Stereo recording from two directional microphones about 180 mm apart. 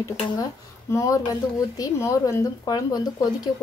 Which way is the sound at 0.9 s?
20° left (ahead or behind).